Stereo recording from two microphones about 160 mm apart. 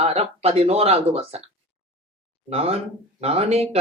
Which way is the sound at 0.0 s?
40° right (ahead or behind).